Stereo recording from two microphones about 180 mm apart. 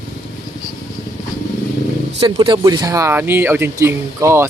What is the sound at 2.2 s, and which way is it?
Speech, 25° right (ahead or behind).